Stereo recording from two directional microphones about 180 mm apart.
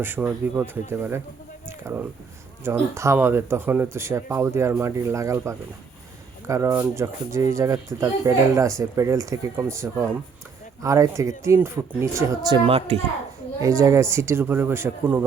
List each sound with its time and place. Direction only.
0.0 s speech: 10° right (ahead or behind)
12.6 s speech: 35° right (ahead or behind)
13.6 s speech: 15° right (ahead or behind)